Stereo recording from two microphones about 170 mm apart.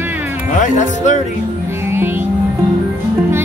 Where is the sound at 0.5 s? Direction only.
45° left (ahead or behind).